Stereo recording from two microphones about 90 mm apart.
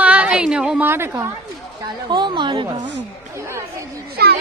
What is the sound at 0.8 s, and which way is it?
Speech, 25° right (ahead or behind).